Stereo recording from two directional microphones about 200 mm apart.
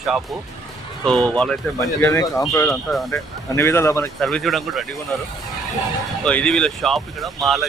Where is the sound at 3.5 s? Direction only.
15° left (ahead or behind).